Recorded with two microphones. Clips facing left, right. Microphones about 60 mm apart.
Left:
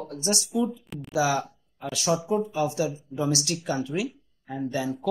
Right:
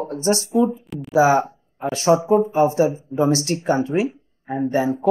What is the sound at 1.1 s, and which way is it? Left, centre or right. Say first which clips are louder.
Speech: right 9 dB; right.